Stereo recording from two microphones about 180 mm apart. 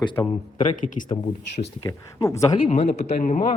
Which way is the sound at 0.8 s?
45° left (ahead or behind).